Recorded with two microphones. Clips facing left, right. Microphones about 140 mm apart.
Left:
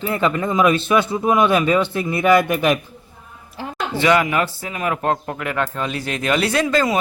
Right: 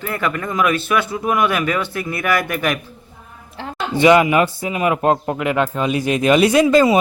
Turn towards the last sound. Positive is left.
turn(degrees=-15)  # may be behind; listen again after turning